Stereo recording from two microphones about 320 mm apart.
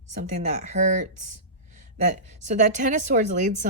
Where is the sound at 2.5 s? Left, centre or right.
Right.